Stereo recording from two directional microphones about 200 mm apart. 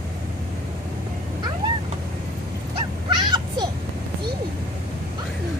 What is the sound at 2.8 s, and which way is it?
Cat, 20° right (ahead or behind).